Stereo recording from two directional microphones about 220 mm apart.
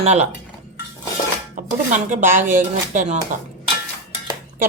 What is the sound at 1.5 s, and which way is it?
Dishes, 35° right (ahead or behind).